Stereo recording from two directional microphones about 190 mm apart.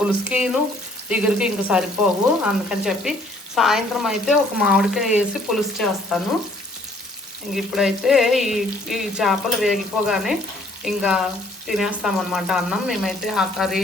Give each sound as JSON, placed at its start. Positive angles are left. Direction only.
{"t": 0.0, "sound": "frying", "side_deg": -5}
{"t": 7.5, "sound": "frying", "side_deg": 0}